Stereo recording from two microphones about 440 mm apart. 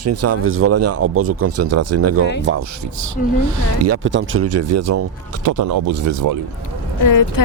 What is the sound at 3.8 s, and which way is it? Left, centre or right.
Speech, right.